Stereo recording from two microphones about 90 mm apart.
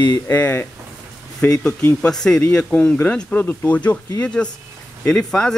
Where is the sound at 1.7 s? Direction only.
20° left (ahead or behind).